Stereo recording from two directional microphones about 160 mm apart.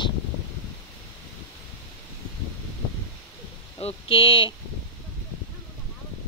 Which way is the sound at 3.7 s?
35° left (ahead or behind).